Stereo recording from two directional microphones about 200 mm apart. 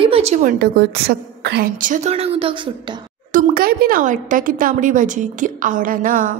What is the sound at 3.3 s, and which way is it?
A woman's voice, 45° right (ahead or behind).